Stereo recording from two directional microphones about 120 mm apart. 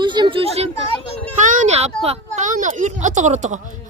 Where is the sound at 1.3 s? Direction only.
90° right.